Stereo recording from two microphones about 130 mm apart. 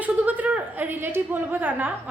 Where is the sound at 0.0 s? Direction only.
10° right (ahead or behind).